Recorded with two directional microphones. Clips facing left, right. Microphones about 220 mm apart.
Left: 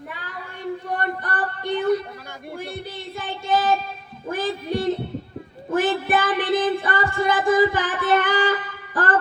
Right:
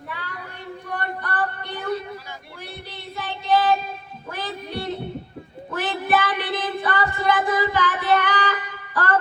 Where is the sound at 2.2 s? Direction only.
50° left (ahead or behind).